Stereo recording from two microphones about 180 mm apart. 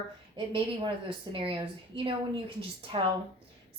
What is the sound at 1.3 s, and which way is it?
A woman's voice, 30° right (ahead or behind).